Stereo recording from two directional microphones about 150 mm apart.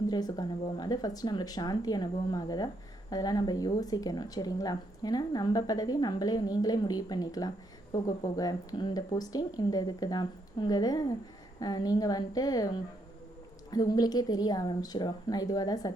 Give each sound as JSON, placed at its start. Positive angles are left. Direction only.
{"t": 0.1, "sound": "speech", "side_deg": 25}